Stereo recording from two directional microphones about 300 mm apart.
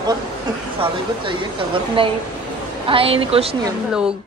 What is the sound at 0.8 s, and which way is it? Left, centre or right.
A woman's voice, centre.